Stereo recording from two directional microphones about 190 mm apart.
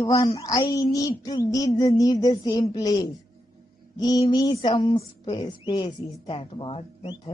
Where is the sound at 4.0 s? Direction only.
20° left (ahead or behind).